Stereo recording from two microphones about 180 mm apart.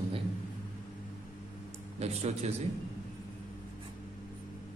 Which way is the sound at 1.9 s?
35° right (ahead or behind).